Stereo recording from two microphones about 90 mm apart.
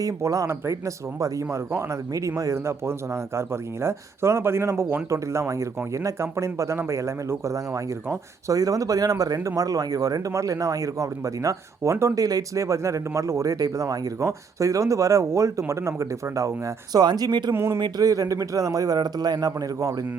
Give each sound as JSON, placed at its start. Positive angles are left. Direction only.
{"t": 0.0, "sound": "speech", "side_deg": -40}
{"t": 8.5, "sound": "speech", "side_deg": -40}
{"t": 17.5, "sound": "speech", "side_deg": -25}
{"t": 17.7, "sound": "speech", "side_deg": -50}